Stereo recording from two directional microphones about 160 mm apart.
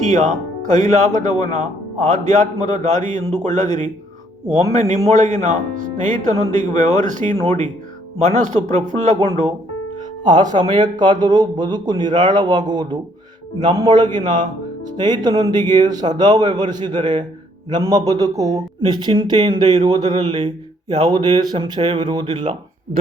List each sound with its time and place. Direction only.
0.0 s speech: 50° right (ahead or behind)
10.2 s speech: 25° right (ahead or behind)